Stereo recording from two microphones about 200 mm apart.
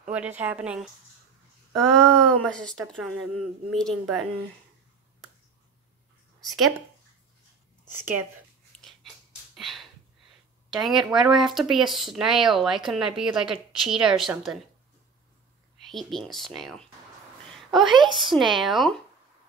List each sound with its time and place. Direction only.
0.4 s speech: 5° right (ahead or behind)
6.4 s speech: centre (ahead or behind)
8.7 s a sound: 5° left (ahead or behind)
10.8 s speech: centre (ahead or behind)
15.8 s a woman's voice: centre (ahead or behind)